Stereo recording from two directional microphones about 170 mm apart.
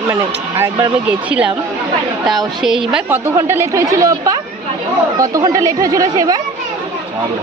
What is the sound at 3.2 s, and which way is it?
Speech, 15° right (ahead or behind).